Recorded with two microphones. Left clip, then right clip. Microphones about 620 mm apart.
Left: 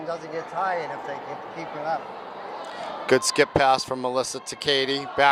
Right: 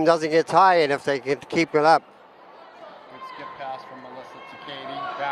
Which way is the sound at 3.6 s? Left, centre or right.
Left.